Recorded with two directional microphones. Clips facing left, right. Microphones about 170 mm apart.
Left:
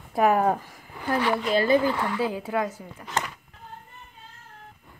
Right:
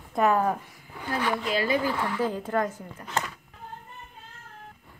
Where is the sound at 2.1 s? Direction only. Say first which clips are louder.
Even; 10° left (ahead or behind).